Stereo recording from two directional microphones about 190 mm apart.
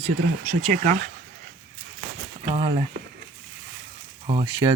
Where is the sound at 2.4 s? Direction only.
25° right (ahead or behind).